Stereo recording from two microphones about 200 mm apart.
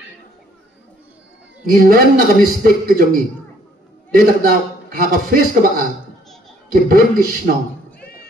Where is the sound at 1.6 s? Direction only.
45° right (ahead or behind).